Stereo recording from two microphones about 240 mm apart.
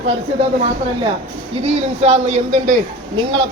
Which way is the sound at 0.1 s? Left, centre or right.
Right.